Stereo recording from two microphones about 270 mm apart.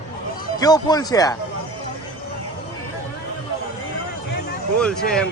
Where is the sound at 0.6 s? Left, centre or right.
Centre.